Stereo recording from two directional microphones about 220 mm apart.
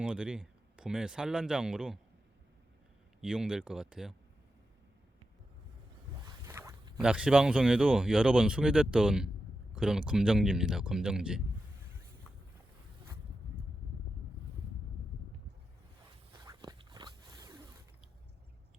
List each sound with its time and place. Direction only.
0.0 s speech: 5° right (ahead or behind)
3.2 s speech: 5° right (ahead or behind)
6.2 s zipper: 15° right (ahead or behind)
7.0 s speech: 5° right (ahead or behind)
16.5 s a sound: 15° right (ahead or behind)